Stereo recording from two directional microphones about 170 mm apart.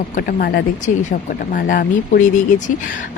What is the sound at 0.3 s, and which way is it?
Speech, 60° left (ahead or behind).